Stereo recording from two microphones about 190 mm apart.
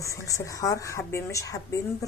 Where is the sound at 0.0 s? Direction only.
15° left (ahead or behind).